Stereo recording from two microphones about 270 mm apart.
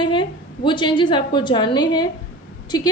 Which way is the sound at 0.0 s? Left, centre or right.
Centre.